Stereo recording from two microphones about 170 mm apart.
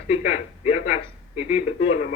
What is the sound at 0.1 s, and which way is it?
Speech, 40° left (ahead or behind).